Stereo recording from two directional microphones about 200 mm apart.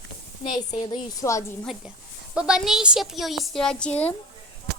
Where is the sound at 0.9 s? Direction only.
20° left (ahead or behind).